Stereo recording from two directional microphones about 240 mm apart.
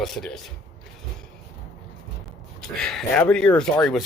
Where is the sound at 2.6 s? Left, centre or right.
Centre.